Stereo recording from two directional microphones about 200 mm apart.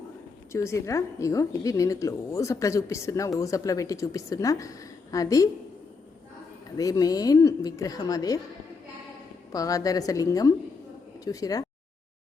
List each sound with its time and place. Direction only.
0.5 s a woman's voice: 15° left (ahead or behind)
6.7 s a woman's voice: 20° left (ahead or behind)
9.5 s a woman's voice: 15° left (ahead or behind)